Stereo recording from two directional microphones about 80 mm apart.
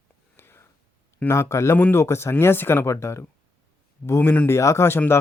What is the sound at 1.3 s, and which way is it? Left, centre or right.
Speech, left.